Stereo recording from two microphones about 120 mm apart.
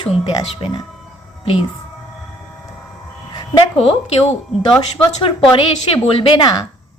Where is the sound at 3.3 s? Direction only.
35° left (ahead or behind).